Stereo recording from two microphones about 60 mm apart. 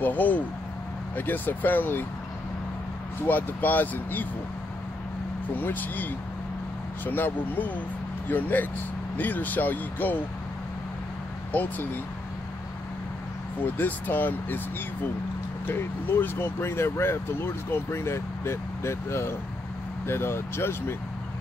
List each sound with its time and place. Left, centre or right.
0.0 s speech: left
3.3 s speech: left
5.6 s speech: left
11.5 s speech: left
13.7 s speech: left
15.6 s speech: left